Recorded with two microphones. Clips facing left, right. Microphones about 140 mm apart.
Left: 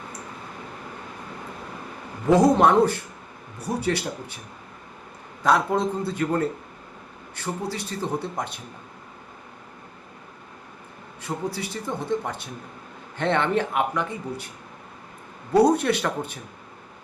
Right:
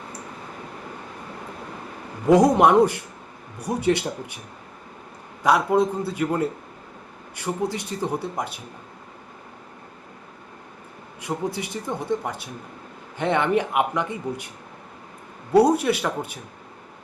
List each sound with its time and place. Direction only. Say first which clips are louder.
2.2 s speech: right 1 dB; 15° right (ahead or behind)
5.4 s speech: right 2 dB; 10° right (ahead or behind)
11.2 s speech: right 2 dB; 15° right (ahead or behind)
15.5 s speech: right 1 dB; 10° right (ahead or behind)